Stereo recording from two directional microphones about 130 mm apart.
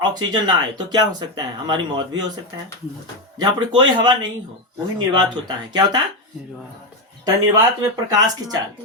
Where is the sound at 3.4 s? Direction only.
35° right (ahead or behind).